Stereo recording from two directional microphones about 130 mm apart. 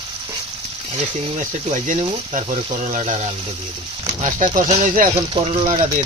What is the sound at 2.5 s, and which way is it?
Speech, 55° right (ahead or behind).